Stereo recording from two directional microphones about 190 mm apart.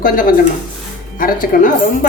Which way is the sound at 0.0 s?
45° left (ahead or behind).